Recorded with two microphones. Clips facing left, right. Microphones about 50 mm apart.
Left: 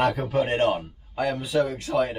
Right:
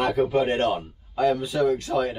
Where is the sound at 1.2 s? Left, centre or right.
Left.